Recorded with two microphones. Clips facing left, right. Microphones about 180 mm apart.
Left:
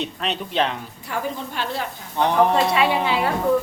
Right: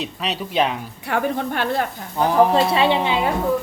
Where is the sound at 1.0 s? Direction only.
65° right (ahead or behind).